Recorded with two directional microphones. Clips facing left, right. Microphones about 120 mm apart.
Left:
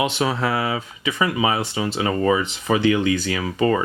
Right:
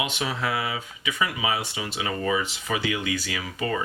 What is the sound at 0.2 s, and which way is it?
Speech, 40° left (ahead or behind).